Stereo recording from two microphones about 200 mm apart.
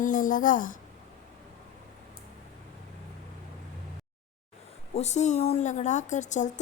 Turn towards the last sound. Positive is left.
turn(degrees=35)  # may be behind; listen again after turning